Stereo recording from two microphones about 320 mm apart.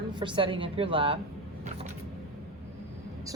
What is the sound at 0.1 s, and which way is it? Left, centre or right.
A woman's voice, centre.